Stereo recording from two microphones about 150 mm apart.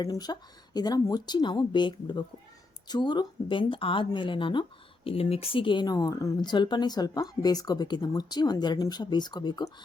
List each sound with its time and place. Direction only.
0.0 s speech: 25° left (ahead or behind)